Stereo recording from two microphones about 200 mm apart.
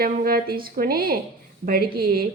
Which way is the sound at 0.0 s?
50° right (ahead or behind).